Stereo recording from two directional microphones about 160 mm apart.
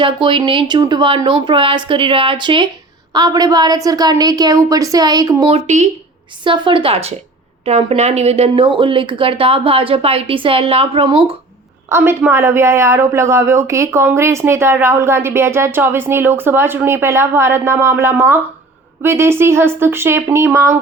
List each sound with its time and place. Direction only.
0.0 s a woman's voice: 30° right (ahead or behind)
5.5 s speech: 45° right (ahead or behind)
6.4 s speech: 30° right (ahead or behind)
11.9 s speech: 15° right (ahead or behind)